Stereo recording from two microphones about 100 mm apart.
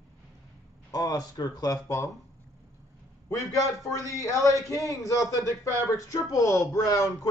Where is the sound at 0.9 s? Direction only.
40° left (ahead or behind).